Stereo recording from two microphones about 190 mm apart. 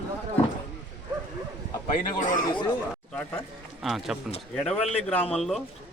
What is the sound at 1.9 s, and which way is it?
Speech, 45° left (ahead or behind).